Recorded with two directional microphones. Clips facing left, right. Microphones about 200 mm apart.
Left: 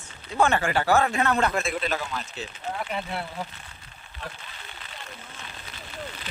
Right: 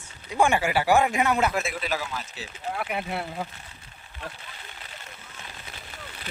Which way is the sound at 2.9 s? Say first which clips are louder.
Right 1 dB; 20° right (ahead or behind).